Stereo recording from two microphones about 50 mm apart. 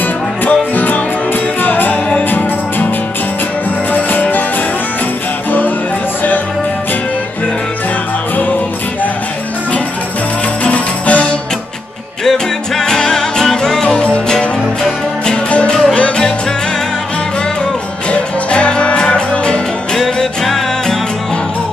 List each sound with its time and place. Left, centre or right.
0.5 s music: left
3.9 s music: left
10.6 s music: left
12.3 s music: centre
13.8 s music: left
15.7 s music: centre
18.1 s music: left
20.0 s music: centre